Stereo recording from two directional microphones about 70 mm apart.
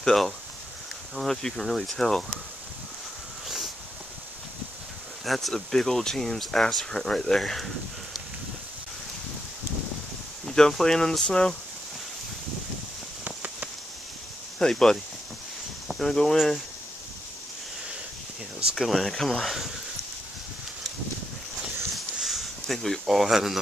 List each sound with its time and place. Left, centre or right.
0.0 s speech: centre
5.2 s speech: centre
10.4 s speech: centre
13.2 s a sound: centre
14.6 s speech: centre
18.7 s speech: centre
22.1 s a sound: centre